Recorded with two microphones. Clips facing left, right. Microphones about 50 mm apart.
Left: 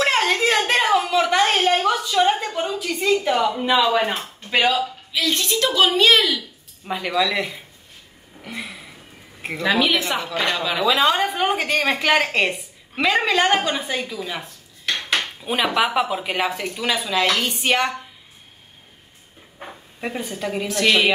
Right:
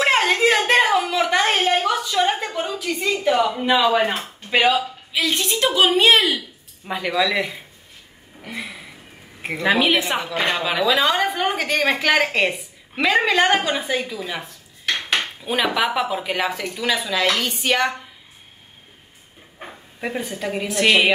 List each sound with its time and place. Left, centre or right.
0.3 s a sound: centre
1.9 s a sound: centre
2.5 s speech: centre
4.2 s a woman's voice: centre
6.9 s a woman's voice: centre
8.5 s a sound: centre
9.4 s a woman's voice: centre
11.3 s a woman's voice: centre
15.4 s a woman's voice: centre
20.0 s a woman's voice: centre